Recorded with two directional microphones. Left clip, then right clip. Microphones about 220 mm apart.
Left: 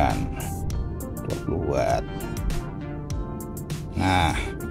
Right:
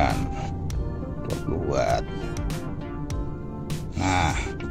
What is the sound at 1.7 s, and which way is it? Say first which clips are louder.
Speech: even; 15° left (ahead or behind).